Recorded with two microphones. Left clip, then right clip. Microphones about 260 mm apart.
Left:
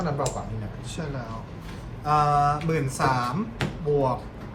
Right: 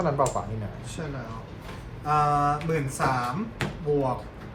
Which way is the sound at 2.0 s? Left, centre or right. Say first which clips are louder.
Left 2 dB; centre.